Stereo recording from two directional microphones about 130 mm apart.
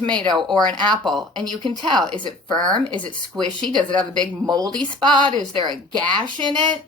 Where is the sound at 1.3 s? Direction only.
35° right (ahead or behind).